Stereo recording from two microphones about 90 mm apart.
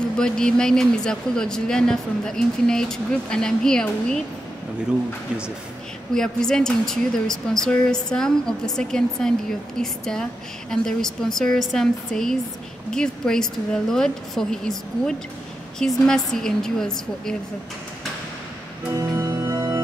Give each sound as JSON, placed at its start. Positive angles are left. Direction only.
{"t": 0.2, "sound": "speech", "side_deg": 10}
{"t": 6.1, "sound": "a woman's voice", "side_deg": 5}
{"t": 18.9, "sound": "music", "side_deg": -30}